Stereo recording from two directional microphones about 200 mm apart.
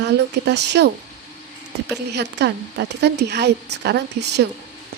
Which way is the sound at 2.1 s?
60° right (ahead or behind).